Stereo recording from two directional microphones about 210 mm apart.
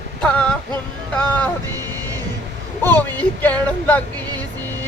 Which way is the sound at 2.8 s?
10° left (ahead or behind).